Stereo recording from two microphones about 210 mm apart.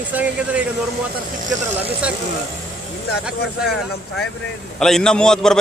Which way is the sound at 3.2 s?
5° right (ahead or behind).